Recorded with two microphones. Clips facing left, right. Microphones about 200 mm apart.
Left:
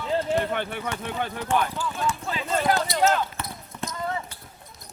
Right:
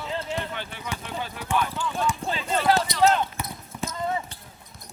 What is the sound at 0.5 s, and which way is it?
Speech, 55° left (ahead or behind).